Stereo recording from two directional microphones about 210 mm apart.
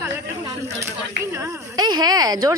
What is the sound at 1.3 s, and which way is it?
Speech, 15° right (ahead or behind).